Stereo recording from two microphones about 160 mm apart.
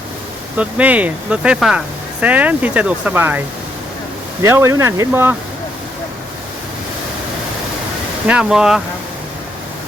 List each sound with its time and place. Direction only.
0.5 s speech: 10° right (ahead or behind)
4.4 s speech: 15° right (ahead or behind)
8.3 s speech: 5° right (ahead or behind)